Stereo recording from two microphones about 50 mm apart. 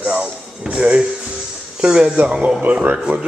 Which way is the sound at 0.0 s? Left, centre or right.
Centre.